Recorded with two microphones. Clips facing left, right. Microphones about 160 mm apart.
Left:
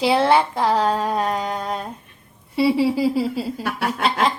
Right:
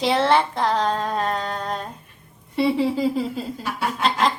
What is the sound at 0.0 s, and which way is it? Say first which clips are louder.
Speech: left 2 dB; 10° left (ahead or behind).